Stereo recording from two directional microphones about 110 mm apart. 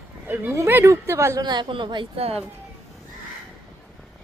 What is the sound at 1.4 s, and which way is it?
Speech, 40° right (ahead or behind).